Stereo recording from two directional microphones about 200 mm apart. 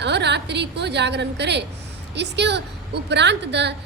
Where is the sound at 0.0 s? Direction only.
60° right (ahead or behind).